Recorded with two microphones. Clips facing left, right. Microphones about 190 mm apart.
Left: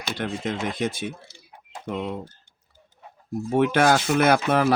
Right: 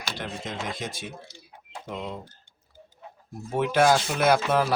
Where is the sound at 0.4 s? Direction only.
65° left (ahead or behind).